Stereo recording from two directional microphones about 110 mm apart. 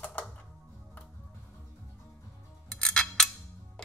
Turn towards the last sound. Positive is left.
turn(degrees=5)  # may be behind; listen again after turning